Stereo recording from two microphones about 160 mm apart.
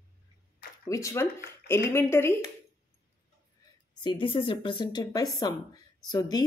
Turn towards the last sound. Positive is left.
turn(degrees=25)  # may be behind; listen again after turning